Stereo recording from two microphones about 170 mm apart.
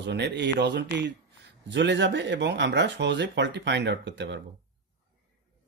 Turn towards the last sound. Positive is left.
turn(degrees=-90)